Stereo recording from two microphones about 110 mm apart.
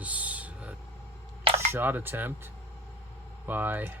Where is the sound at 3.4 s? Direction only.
15° right (ahead or behind).